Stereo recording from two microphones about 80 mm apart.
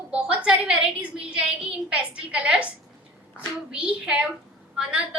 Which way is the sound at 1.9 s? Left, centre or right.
Centre.